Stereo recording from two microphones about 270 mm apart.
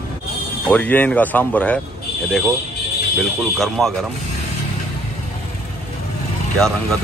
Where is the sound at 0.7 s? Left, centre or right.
Centre.